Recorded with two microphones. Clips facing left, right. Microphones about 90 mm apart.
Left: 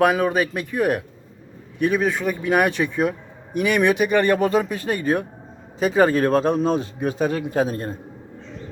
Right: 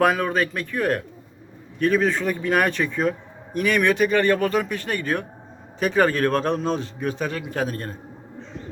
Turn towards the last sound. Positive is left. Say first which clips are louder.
# left 5 dB
turn(degrees=20)  # may be behind; listen again after turning